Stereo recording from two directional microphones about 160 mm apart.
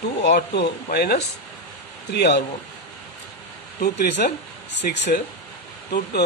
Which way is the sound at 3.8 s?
80° left.